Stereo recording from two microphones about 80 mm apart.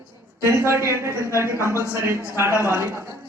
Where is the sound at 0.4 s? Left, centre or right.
Right.